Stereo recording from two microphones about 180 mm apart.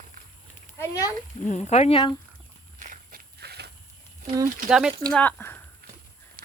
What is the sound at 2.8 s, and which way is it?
Walk, 45° right (ahead or behind).